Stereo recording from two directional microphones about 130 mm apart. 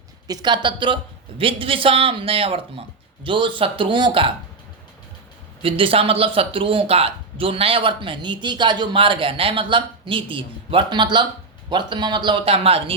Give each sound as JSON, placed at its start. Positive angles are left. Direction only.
{"t": 0.3, "sound": "a man's voice", "side_deg": -30}
{"t": 5.6, "sound": "a man's voice", "side_deg": -45}